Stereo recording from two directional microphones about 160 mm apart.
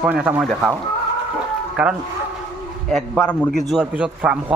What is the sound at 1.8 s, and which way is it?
Speech, 5° right (ahead or behind).